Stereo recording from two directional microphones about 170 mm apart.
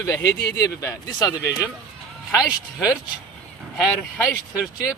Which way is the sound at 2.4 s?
5° right (ahead or behind).